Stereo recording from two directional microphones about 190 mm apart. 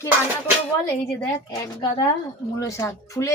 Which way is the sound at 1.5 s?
20° left (ahead or behind).